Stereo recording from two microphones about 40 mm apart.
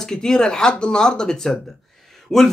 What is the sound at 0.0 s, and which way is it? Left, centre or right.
Speech, centre.